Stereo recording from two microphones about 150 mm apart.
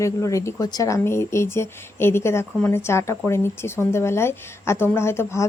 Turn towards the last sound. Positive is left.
turn(degrees=20)  # may be behind; listen again after turning